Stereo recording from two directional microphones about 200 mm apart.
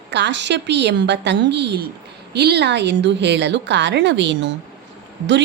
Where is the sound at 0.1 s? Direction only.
60° right (ahead or behind).